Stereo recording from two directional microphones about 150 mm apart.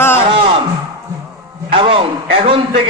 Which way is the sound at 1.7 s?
35° right (ahead or behind).